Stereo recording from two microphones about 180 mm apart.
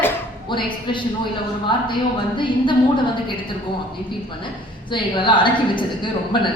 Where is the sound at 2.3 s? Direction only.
25° left (ahead or behind).